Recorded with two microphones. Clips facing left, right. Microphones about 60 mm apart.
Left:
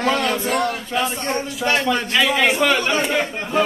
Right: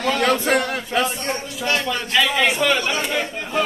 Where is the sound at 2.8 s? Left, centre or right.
Left.